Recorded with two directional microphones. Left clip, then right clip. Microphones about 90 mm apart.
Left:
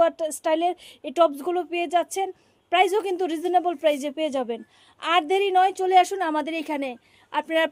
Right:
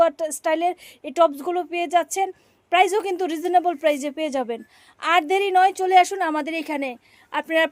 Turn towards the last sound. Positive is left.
turn(degrees=-25)  # may be behind; listen again after turning